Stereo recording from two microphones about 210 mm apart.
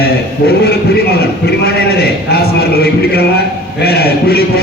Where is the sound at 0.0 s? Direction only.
50° left (ahead or behind).